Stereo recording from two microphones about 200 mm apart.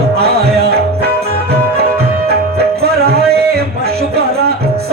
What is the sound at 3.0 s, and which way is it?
Music, 50° right (ahead or behind).